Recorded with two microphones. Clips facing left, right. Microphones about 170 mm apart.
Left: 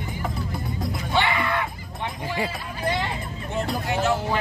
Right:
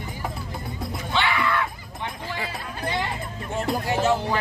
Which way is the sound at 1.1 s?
20° left (ahead or behind).